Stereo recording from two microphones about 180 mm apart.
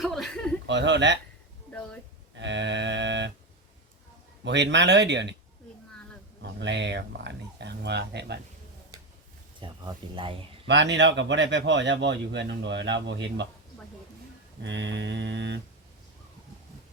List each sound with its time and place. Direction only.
0.0 s chuckle: centre (ahead or behind)
0.7 s speech: 80° right
2.3 s speech: 80° right
4.4 s speech: 75° right (ahead or behind)
6.6 s speech: 75° right (ahead or behind)
9.6 s speech: 25° right (ahead or behind)
10.7 s speech: 75° right (ahead or behind)
14.6 s speech: 85° right